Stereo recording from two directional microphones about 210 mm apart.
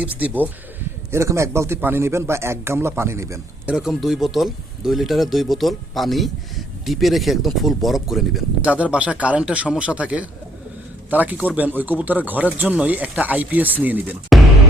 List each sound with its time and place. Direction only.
0.0 s speech: 5° right (ahead or behind)
3.8 s speech: centre (ahead or behind)